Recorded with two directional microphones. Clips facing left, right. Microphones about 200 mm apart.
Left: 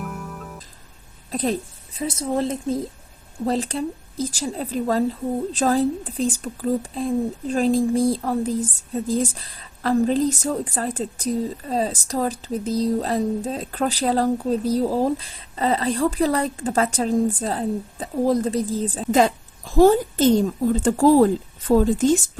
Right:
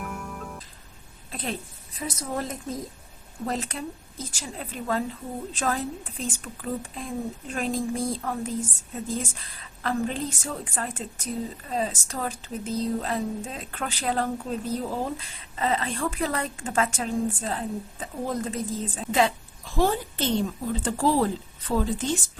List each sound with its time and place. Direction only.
0.0 s music: centre (ahead or behind)
1.3 s a woman's voice: 40° left (ahead or behind)